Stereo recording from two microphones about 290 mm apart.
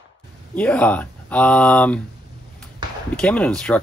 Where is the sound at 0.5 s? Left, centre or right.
Centre.